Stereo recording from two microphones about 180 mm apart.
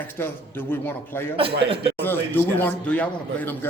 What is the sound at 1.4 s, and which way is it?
Speech, 30° right (ahead or behind).